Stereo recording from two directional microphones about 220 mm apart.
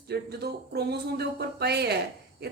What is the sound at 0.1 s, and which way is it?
Speech, 45° right (ahead or behind).